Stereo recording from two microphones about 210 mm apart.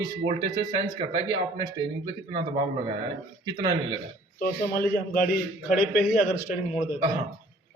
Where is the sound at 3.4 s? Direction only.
20° right (ahead or behind).